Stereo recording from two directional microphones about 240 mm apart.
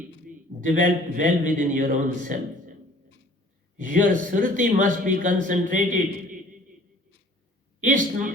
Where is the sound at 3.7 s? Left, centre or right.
Right.